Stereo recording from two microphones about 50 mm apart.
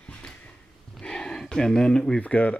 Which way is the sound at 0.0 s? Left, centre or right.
Left.